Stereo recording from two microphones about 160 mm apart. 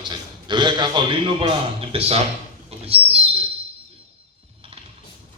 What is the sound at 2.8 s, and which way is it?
Bird, 40° right (ahead or behind).